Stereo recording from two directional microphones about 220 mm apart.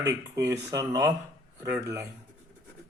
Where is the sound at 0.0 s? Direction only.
15° right (ahead or behind).